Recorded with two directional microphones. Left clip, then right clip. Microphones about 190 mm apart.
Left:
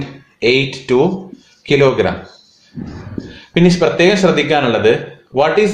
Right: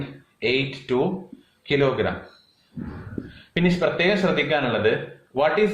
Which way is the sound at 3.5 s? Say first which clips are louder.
Left 9 dB; 55° left (ahead or behind).